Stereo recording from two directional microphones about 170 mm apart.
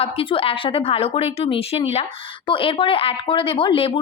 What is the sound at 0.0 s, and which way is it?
Speech, 35° left (ahead or behind).